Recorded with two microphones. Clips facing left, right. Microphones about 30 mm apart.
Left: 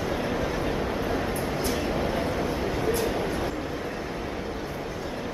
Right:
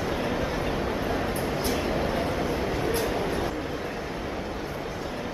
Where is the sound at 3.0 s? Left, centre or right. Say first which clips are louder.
Even; centre.